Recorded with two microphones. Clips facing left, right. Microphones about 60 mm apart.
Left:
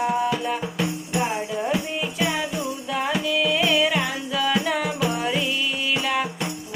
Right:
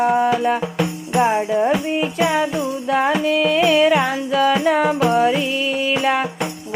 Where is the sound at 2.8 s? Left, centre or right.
Right.